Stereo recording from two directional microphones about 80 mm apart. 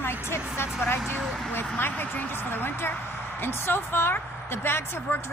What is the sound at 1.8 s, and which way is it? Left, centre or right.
Speech, left.